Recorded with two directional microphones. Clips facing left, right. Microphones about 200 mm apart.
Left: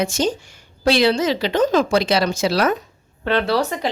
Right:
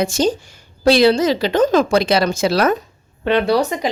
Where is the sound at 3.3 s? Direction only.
15° right (ahead or behind).